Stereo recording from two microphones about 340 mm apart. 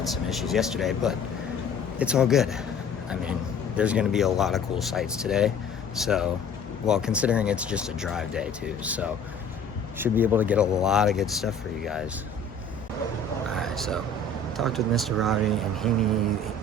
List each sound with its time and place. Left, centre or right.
0.0 s speech: centre
3.8 s speech: centre
13.6 s a sound: centre
14.5 s speech: centre